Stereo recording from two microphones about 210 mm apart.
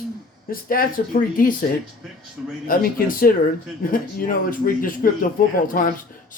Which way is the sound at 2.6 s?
40° left (ahead or behind).